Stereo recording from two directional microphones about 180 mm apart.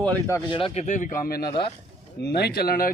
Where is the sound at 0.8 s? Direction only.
45° left (ahead or behind).